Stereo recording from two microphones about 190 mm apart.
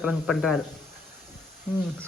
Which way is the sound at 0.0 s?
5° right (ahead or behind).